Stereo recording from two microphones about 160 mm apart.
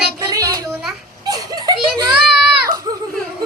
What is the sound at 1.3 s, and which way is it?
Giggle, 25° right (ahead or behind).